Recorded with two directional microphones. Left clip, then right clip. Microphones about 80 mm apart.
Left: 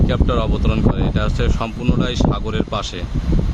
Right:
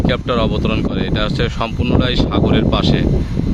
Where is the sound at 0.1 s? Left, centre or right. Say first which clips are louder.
Right 4 dB; right.